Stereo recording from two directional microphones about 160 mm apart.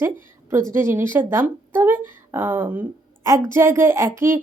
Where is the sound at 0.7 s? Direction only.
15° right (ahead or behind).